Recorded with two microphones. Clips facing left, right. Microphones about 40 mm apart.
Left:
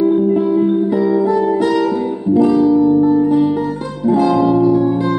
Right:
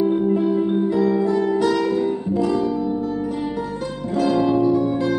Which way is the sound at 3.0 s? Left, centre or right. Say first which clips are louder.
Left 12 dB; left.